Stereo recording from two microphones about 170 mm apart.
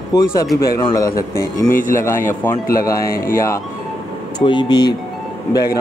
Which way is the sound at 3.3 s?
15° left (ahead or behind).